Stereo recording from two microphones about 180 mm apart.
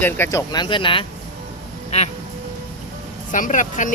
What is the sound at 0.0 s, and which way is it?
Speech, 15° left (ahead or behind).